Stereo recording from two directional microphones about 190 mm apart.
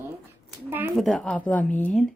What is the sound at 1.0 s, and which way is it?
Speech, centre (ahead or behind).